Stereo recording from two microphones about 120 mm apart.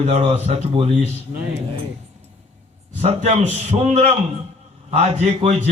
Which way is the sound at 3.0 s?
65° right (ahead or behind).